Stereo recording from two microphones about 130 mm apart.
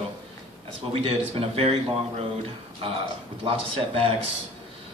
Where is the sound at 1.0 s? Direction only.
50° right (ahead or behind).